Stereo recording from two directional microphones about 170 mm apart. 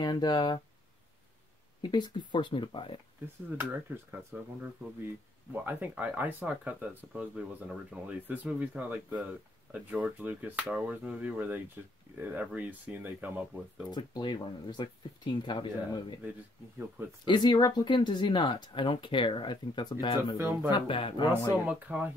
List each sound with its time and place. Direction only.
0.0 s speech: 25° left (ahead or behind)
1.8 s speech: 25° left (ahead or behind)
3.4 s speech: 10° right (ahead or behind)
13.8 s speech: 25° left (ahead or behind)
16.3 s speech: 10° right (ahead or behind)
17.2 s speech: 25° left (ahead or behind)
21.6 s speech: 10° right (ahead or behind)